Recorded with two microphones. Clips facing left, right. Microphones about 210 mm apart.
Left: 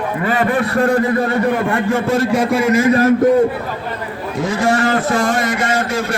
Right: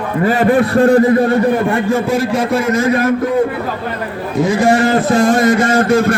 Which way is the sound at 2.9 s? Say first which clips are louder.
Left 2 dB; 40° left (ahead or behind).